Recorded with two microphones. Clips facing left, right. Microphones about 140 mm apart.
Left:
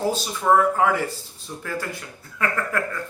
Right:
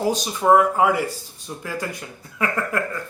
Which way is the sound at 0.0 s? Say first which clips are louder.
Right 3 dB; 15° right (ahead or behind).